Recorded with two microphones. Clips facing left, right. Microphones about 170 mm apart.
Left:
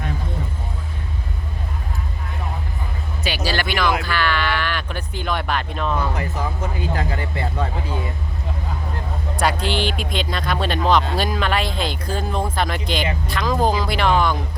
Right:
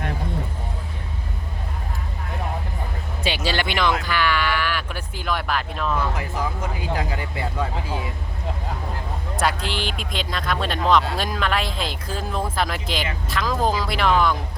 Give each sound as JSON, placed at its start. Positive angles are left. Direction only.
{"t": 3.2, "sound": "speech", "side_deg": -25}
{"t": 9.3, "sound": "speech", "side_deg": 0}